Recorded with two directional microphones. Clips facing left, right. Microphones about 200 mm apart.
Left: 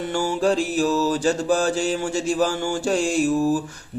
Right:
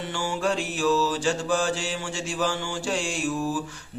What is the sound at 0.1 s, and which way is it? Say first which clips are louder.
Mantra: left 6 dB; 40° left (ahead or behind).